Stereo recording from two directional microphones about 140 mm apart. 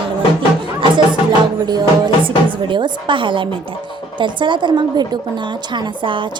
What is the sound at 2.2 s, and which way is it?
A woman's voice, 35° right (ahead or behind).